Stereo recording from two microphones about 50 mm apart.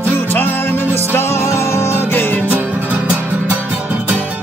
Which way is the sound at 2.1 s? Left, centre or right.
Left.